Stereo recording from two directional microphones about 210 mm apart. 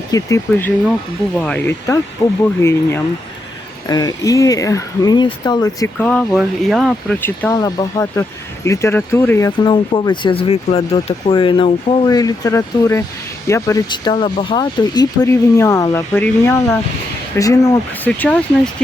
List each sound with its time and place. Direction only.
0.1 s speech: 15° left (ahead or behind)
6.0 s speech: 5° left (ahead or behind)
9.5 s speech: 20° left (ahead or behind); by 18.7 s 5° left (ahead or behind)